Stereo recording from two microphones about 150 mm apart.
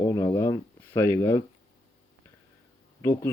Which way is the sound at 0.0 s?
20° left (ahead or behind).